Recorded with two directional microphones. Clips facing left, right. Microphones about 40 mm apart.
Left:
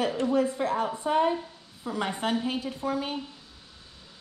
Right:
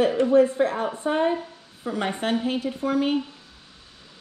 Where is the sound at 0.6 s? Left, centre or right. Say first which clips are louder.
Right 4 dB; right.